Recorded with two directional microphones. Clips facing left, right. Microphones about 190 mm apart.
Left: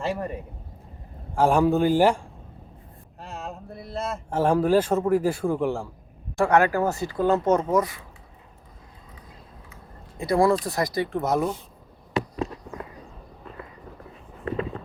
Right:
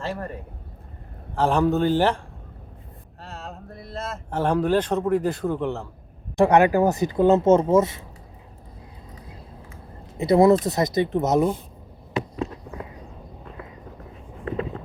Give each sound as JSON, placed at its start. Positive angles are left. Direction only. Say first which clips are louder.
{"t": 0.0, "sound": "speech", "louder": "left 2 dB", "side_deg": 10}
{"t": 1.4, "sound": "a man's voice", "louder": "left 1 dB", "side_deg": 10}
{"t": 6.3, "sound": "speech", "louder": "right 3 dB", "side_deg": -20}
{"t": 10.2, "sound": "speech", "louder": "right 5 dB", "side_deg": -20}